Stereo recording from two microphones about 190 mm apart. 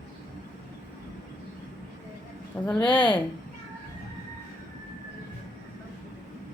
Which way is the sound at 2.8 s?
25° left (ahead or behind).